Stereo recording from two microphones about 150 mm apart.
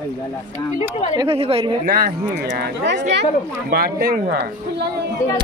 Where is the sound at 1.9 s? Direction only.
90° right.